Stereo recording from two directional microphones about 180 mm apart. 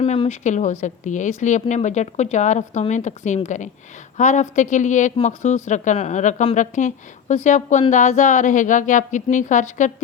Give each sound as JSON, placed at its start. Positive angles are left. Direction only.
{"t": 0.0, "sound": "speech", "side_deg": 35}